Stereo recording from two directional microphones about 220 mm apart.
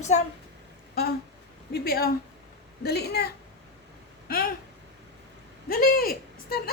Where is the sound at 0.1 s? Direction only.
30° left (ahead or behind).